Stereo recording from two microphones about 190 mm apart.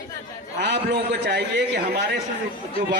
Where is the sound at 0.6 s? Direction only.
65° right (ahead or behind).